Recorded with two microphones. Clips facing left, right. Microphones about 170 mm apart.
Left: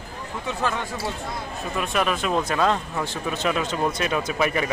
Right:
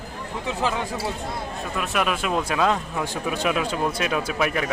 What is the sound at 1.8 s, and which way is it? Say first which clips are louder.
Speech: left 1 dB; 5° right (ahead or behind).